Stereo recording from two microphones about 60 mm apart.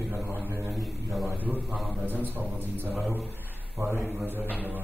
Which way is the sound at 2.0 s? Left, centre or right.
Right.